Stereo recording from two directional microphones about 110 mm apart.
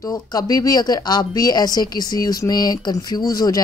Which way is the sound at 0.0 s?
35° left (ahead or behind).